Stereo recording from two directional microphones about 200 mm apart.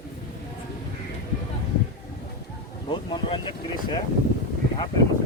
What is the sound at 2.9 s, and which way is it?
Boat, 25° left (ahead or behind).